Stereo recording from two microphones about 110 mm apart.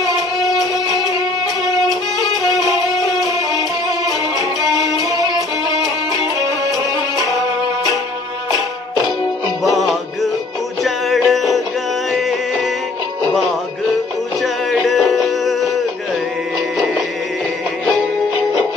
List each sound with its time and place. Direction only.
0.0 s music: 35° left (ahead or behind)
9.6 s music: centre (ahead or behind)
14.4 s music: centre (ahead or behind)
16.7 s music: centre (ahead or behind)